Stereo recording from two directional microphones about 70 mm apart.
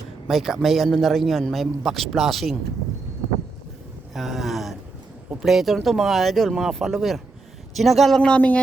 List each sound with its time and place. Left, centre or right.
0.3 s a man's voice: centre
4.1 s a man's voice: centre
8.4 s speech: left